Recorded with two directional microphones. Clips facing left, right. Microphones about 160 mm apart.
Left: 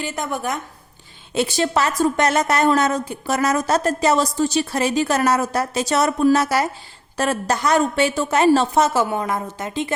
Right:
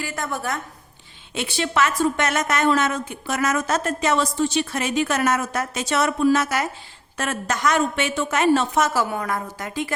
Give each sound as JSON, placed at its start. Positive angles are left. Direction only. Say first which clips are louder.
{"t": 0.0, "sound": "a woman's voice", "louder": "left 3 dB", "side_deg": 20}
{"t": 1.3, "sound": "a woman's voice", "louder": "left 5 dB", "side_deg": 40}